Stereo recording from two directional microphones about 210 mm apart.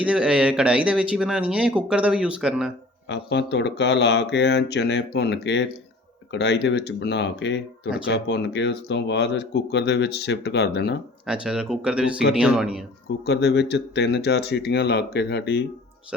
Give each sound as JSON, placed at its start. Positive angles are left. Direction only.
{"t": 0.0, "sound": "speech", "side_deg": -5}
{"t": 3.1, "sound": "speech", "side_deg": 55}
{"t": 11.3, "sound": "speech", "side_deg": -5}
{"t": 13.2, "sound": "speech", "side_deg": 55}